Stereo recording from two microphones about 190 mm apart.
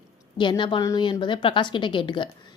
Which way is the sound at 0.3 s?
25° left (ahead or behind).